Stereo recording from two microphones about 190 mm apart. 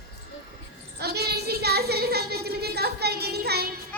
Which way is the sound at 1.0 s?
60° right (ahead or behind).